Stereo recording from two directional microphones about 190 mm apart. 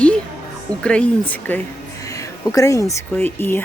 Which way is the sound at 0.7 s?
5° left (ahead or behind).